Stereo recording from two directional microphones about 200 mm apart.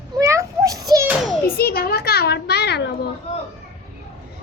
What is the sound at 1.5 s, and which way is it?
A child's voice, 50° left (ahead or behind).